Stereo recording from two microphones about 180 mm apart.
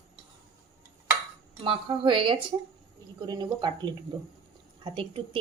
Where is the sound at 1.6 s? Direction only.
30° right (ahead or behind).